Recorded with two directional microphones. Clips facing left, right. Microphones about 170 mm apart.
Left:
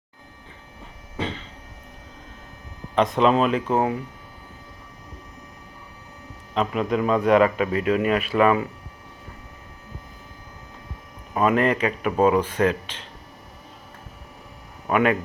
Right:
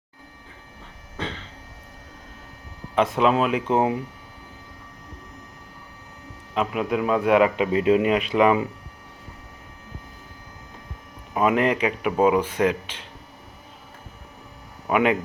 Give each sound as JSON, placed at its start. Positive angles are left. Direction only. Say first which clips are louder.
{"t": 2.9, "sound": "speech", "louder": "left 1 dB", "side_deg": -5}
{"t": 3.7, "sound": "speech", "louder": "right 1 dB", "side_deg": -20}
{"t": 6.5, "sound": "speech", "louder": "left 1 dB", "side_deg": -5}
{"t": 7.5, "sound": "speech", "louder": "right 3 dB", "side_deg": -20}
{"t": 11.3, "sound": "speech", "louder": "even", "side_deg": -10}
{"t": 14.8, "sound": "speech", "louder": "even", "side_deg": -15}